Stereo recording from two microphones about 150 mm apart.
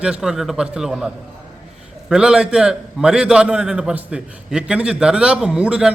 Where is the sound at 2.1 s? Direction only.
5° right (ahead or behind).